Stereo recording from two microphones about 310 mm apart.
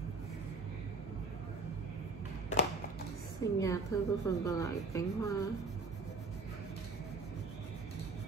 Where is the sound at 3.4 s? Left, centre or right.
Centre.